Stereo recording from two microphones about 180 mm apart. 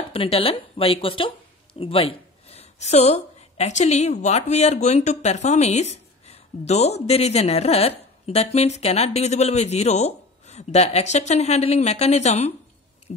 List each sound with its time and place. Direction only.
0.1 s speech: 30° left (ahead or behind)